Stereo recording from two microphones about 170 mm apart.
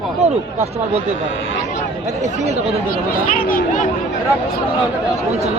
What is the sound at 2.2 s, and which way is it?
Speech, 40° right (ahead or behind).